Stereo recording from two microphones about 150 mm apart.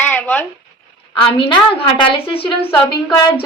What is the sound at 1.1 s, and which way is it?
A woman's voice, 35° left (ahead or behind).